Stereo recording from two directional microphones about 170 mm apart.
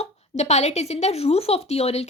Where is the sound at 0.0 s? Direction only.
40° left (ahead or behind).